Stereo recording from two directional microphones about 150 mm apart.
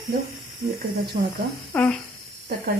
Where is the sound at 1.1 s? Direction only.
70° right (ahead or behind).